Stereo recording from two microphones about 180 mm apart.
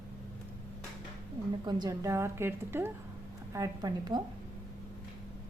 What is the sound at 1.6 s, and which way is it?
A woman's voice, 20° right (ahead or behind).